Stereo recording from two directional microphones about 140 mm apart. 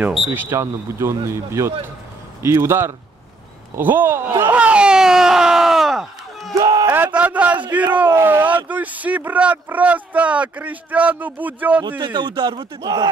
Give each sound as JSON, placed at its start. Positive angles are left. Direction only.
{"t": 0.3, "sound": "speech", "side_deg": -15}
{"t": 6.5, "sound": "a sound", "side_deg": -25}
{"t": 7.2, "sound": "speech", "side_deg": -10}
{"t": 12.0, "sound": "speech", "side_deg": -30}